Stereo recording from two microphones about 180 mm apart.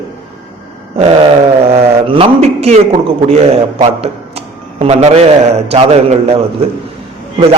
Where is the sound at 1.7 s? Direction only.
30° right (ahead or behind).